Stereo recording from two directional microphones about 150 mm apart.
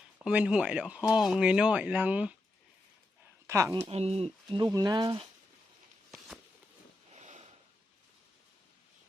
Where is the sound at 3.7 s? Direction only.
45° right (ahead or behind).